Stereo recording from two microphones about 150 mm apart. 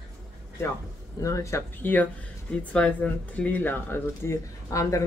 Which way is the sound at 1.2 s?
20° left (ahead or behind).